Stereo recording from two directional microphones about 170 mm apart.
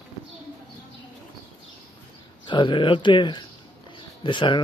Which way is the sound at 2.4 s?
30° left (ahead or behind).